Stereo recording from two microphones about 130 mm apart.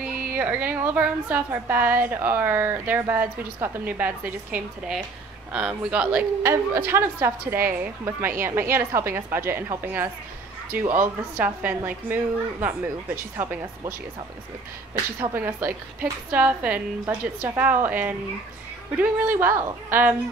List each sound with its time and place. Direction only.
0.0 s a woman's voice: 10° right (ahead or behind)
15.1 s a woman's voice: 15° right (ahead or behind)